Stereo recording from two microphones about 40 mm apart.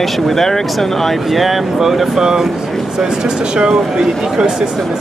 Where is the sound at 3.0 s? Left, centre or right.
Centre.